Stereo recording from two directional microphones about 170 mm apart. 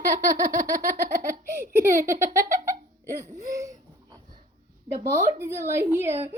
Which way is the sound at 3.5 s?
20° right (ahead or behind).